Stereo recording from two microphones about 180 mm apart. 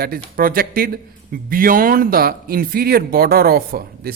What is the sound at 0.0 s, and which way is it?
Speech, 55° right (ahead or behind).